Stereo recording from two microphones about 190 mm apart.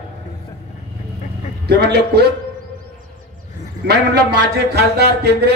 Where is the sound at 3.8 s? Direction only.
60° right (ahead or behind).